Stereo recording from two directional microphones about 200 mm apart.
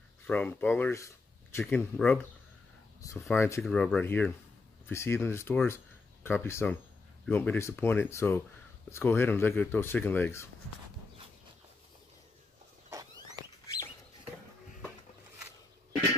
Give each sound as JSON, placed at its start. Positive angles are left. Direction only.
{"t": 0.3, "sound": "speech", "side_deg": 10}